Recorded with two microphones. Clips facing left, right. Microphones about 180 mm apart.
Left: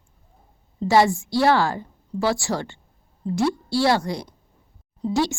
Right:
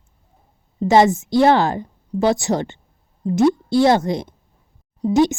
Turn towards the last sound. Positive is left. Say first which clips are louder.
# right 7 dB
turn(degrees=-20)  # may be behind; listen again after turning